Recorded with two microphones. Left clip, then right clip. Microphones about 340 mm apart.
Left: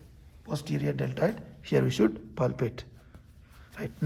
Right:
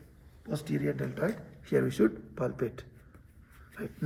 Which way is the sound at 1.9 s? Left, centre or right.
Left.